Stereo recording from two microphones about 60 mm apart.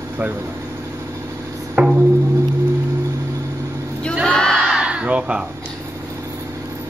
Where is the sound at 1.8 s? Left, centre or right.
Right.